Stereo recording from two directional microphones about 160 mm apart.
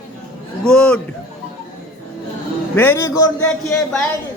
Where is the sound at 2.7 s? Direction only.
15° left (ahead or behind).